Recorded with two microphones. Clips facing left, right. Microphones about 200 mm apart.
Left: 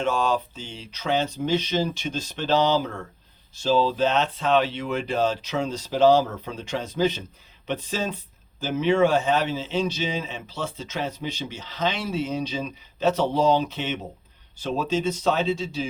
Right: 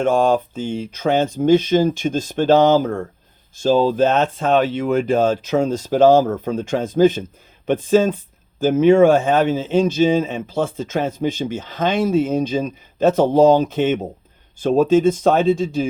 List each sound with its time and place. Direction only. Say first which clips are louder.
0.0 s speech: right 8 dB; 50° right (ahead or behind)